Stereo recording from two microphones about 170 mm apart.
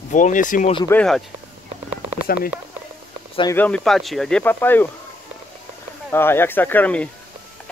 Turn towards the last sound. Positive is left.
turn(degrees=10)  # may be behind; listen again after turning